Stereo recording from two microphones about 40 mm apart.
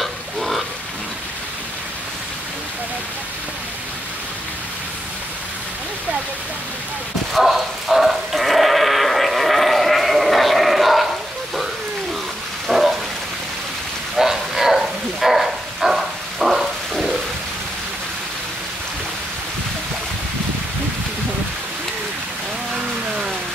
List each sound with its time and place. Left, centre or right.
0.0 s frying: centre
7.3 s sheep: centre
12.6 s bow-wow: centre
14.1 s bow-wow: centre